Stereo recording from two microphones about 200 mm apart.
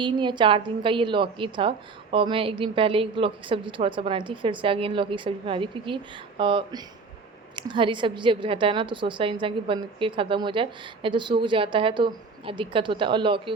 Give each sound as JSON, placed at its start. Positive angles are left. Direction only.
{"t": 0.0, "sound": "a woman's voice", "side_deg": -25}